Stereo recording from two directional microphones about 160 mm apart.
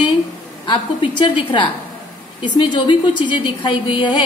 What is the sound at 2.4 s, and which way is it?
A woman's voice, 30° left (ahead or behind).